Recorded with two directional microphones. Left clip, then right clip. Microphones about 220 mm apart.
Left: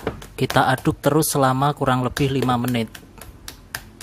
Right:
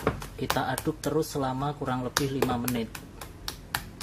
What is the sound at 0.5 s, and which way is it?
Speech, 30° left (ahead or behind).